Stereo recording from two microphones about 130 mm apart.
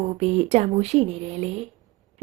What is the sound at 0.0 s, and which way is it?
Speech, 55° right (ahead or behind).